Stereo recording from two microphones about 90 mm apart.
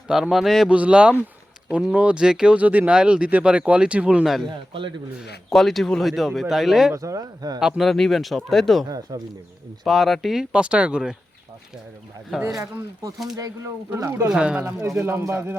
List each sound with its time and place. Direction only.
0.1 s speech: 5° right (ahead or behind)
0.7 s speech: 15° right (ahead or behind)
4.7 s speech: 65° right (ahead or behind)
5.5 s speech: centre (ahead or behind)
6.9 s speech: 40° right (ahead or behind)
7.6 s speech: centre (ahead or behind)
9.1 s speech: 55° right (ahead or behind)
9.8 s speech: centre (ahead or behind)
10.5 s speech: 10° right (ahead or behind)
12.5 s speech: 35° right (ahead or behind)
14.3 s speech: 10° right (ahead or behind)
14.6 s a man's voice: 30° right (ahead or behind)